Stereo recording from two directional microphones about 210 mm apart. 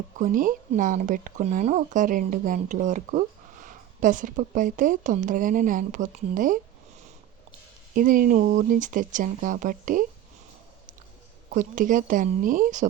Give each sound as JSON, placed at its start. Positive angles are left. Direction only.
{"t": 0.2, "sound": "speech", "side_deg": -40}
{"t": 7.9, "sound": "speech", "side_deg": -40}
{"t": 11.5, "sound": "speech", "side_deg": -40}